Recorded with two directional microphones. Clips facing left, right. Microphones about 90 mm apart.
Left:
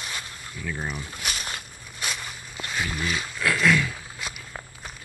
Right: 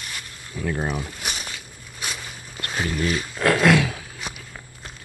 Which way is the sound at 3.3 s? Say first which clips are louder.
Right 5 dB; 45° right (ahead or behind).